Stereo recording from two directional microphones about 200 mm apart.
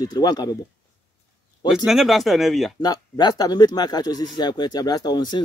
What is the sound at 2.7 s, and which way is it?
A man's voice, 20° left (ahead or behind).